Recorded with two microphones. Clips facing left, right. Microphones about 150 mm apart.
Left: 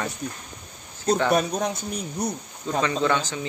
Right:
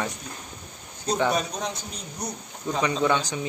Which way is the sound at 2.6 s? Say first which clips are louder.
Even; 15° right (ahead or behind).